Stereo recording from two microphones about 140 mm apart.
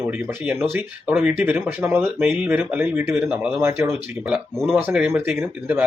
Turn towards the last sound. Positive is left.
turn(degrees=-10)  # may be behind; listen again after turning